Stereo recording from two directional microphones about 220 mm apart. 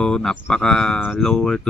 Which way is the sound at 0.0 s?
5° left (ahead or behind).